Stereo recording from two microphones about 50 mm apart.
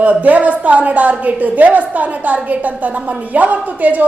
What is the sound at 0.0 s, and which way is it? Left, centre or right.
A woman's voice, right.